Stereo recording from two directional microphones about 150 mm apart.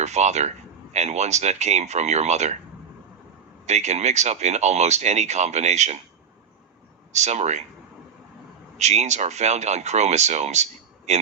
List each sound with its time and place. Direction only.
0.0 s speech: 50° right (ahead or behind)
3.7 s speech: 50° right (ahead or behind)
7.1 s speech: 50° right (ahead or behind)
8.8 s speech: 50° right (ahead or behind)